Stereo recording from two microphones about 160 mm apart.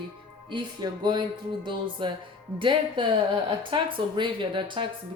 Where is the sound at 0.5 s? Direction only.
30° right (ahead or behind).